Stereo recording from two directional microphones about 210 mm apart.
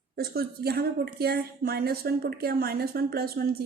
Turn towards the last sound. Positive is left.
turn(degrees=-45)  # may be behind; listen again after turning